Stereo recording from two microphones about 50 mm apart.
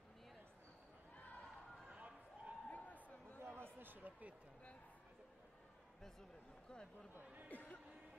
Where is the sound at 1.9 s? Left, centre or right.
Right.